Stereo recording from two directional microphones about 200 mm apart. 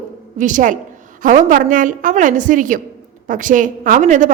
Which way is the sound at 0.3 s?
40° right (ahead or behind).